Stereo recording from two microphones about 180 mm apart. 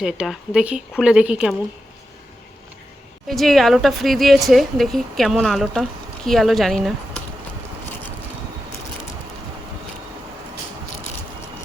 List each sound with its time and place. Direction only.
0.0 s a woman's voice: 5° right (ahead or behind)
3.2 s a woman's voice: centre (ahead or behind)